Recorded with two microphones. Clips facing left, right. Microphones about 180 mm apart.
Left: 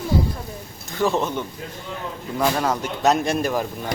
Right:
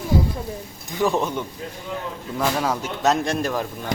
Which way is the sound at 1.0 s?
Centre (ahead or behind).